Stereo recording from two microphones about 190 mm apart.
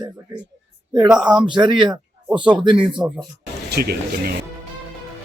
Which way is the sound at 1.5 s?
25° right (ahead or behind).